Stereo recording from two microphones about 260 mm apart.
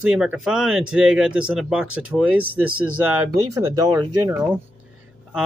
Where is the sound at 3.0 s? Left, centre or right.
Centre.